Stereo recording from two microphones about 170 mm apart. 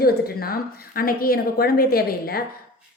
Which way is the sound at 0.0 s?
65° left (ahead or behind).